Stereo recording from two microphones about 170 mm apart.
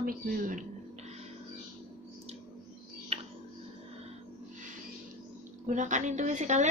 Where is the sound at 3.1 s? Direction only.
40° right (ahead or behind).